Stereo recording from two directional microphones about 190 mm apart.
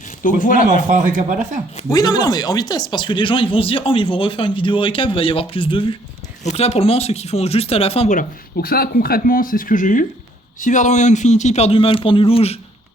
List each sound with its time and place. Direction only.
0.2 s speech: 45° left (ahead or behind)
0.7 s speech: 40° right (ahead or behind)
1.9 s speech: 20° left (ahead or behind)